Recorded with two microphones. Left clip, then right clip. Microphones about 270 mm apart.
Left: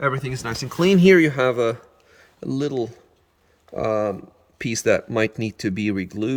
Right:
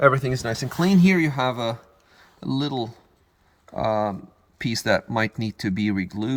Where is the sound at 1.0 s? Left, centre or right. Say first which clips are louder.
Left 9 dB; centre.